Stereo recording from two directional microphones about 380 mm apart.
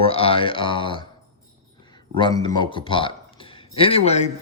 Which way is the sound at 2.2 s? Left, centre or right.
Centre.